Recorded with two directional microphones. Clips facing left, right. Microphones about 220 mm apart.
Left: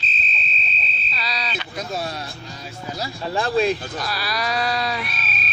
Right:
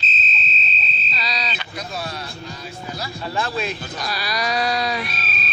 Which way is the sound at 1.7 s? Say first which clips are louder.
Left 3 dB; 45° left (ahead or behind).